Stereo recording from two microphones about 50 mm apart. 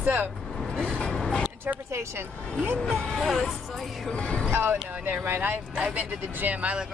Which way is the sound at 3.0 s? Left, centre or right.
Centre.